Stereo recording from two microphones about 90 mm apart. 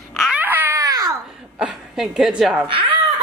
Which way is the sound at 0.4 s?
25° right (ahead or behind).